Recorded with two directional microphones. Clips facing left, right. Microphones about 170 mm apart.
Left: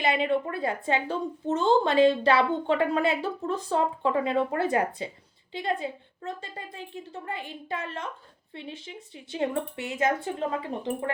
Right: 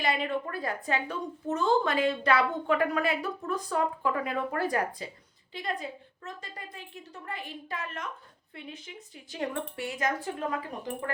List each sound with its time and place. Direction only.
0.0 s a woman's voice: 25° left (ahead or behind)